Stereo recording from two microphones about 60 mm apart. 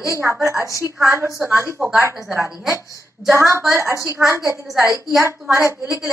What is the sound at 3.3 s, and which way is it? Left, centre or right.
Speech, right.